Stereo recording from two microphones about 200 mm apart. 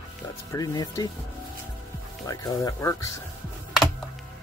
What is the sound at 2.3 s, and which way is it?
Speech, 15° left (ahead or behind).